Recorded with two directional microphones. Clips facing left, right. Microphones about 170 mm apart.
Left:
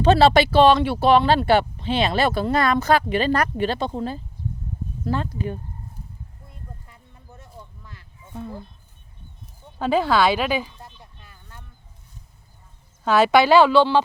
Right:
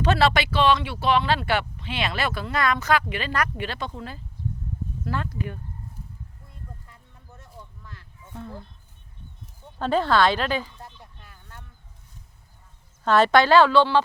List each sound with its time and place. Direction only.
0.0 s speech: 25° left (ahead or behind)
6.8 s a sound: 10° left (ahead or behind)
9.7 s speech: 5° left (ahead or behind)
13.1 s a woman's voice: 5° left (ahead or behind)